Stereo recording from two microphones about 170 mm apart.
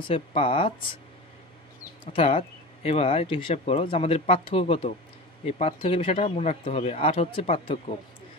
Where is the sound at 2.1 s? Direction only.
35° left (ahead or behind).